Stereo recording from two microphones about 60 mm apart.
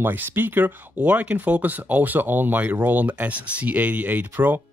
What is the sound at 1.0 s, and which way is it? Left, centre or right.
Speech, right.